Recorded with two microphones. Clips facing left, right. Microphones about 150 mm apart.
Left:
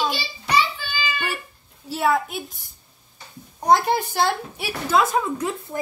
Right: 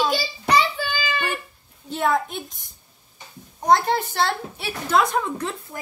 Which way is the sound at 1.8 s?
5° left (ahead or behind).